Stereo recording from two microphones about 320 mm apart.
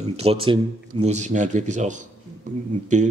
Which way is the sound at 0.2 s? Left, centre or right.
Centre.